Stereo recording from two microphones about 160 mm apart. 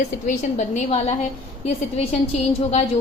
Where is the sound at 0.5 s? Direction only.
45° left (ahead or behind).